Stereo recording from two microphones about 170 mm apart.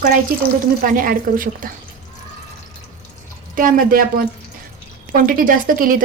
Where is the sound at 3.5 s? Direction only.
55° right (ahead or behind).